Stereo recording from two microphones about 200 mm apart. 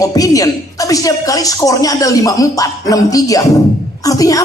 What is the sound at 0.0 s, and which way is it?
A woman's voice, 15° left (ahead or behind).